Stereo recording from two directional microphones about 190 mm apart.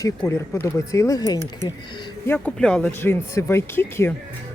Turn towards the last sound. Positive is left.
turn(degrees=10)  # may be behind; listen again after turning